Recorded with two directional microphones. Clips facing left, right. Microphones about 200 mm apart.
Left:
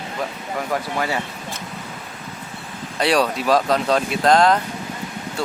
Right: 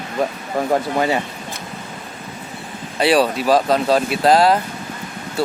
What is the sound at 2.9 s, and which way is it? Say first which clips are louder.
Speech: right 3 dB; 5° right (ahead or behind).